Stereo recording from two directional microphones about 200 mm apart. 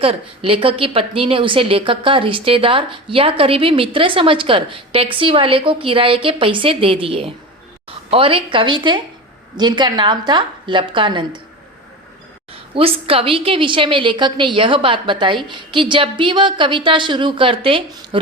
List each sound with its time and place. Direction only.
0.0 s a woman's voice: 30° right (ahead or behind)
12.7 s a woman's voice: 30° right (ahead or behind)